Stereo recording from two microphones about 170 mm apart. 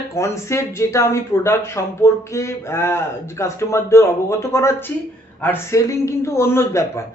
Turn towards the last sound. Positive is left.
turn(degrees=15)  # may be behind; listen again after turning